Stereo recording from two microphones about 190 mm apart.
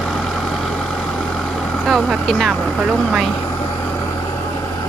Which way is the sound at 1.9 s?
Centre (ahead or behind).